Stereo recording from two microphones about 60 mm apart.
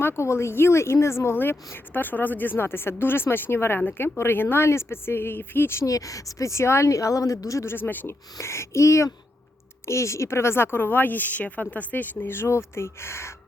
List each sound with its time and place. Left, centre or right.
0.0 s speech: left
5.8 s a woman's voice: left
7.6 s speech: left
8.0 s speech: left
12.3 s speech: left